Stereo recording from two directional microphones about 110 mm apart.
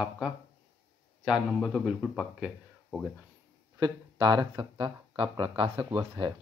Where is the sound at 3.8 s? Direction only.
40° right (ahead or behind).